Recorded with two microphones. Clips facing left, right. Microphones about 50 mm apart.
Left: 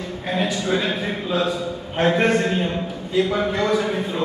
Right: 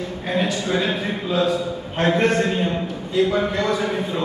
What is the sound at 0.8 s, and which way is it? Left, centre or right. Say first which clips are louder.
A man's voice: right 1 dB; centre.